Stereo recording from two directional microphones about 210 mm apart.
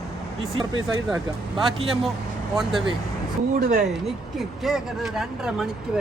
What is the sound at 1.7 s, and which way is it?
Speech, 25° right (ahead or behind).